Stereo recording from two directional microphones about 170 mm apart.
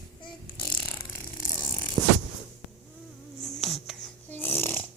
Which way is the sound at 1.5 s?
15° left (ahead or behind).